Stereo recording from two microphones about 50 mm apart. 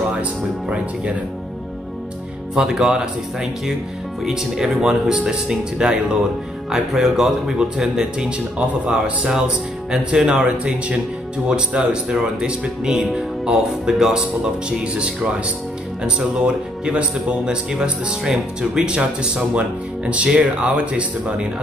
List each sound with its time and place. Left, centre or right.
0.1 s speech: right
2.5 s speech: centre